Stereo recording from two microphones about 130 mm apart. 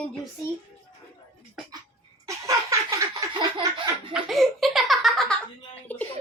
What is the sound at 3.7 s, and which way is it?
Laughter, 40° right (ahead or behind).